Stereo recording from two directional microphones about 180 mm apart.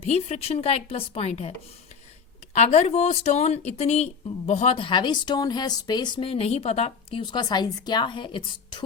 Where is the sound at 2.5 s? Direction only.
40° left (ahead or behind).